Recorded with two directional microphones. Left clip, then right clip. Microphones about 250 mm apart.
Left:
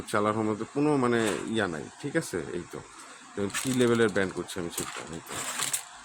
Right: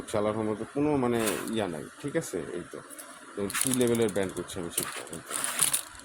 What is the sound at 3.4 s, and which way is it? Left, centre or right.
Speech, centre.